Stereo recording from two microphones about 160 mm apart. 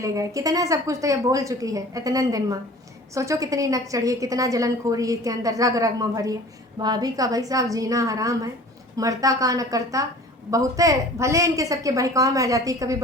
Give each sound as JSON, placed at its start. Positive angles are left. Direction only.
{"t": 0.0, "sound": "a woman's voice", "side_deg": -20}